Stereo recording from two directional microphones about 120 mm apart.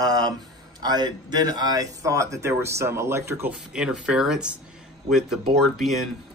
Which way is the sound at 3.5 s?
10° right (ahead or behind).